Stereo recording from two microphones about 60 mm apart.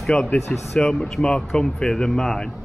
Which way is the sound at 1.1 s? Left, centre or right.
Centre.